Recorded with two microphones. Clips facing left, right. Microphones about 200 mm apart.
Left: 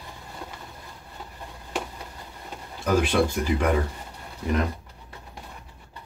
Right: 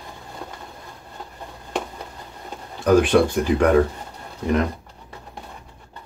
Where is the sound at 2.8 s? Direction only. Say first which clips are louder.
Right 6 dB; 55° right (ahead or behind).